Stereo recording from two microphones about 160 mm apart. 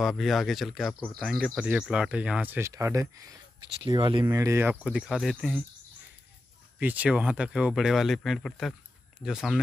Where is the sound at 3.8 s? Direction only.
30° right (ahead or behind).